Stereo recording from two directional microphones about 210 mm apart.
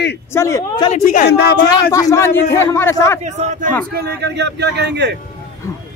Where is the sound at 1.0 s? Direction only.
45° left (ahead or behind).